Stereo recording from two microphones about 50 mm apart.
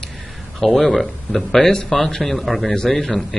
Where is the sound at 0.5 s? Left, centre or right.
Centre.